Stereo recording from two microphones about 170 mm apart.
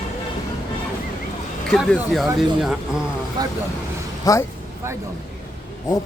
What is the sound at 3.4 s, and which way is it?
Speech, 20° right (ahead or behind).